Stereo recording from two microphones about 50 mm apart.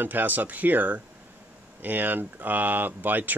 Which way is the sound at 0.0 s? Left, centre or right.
Right.